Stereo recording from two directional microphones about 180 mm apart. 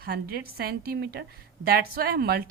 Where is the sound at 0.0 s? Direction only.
60° right (ahead or behind).